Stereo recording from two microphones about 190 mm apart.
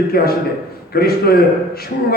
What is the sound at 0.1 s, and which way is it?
A man's voice, 55° left (ahead or behind).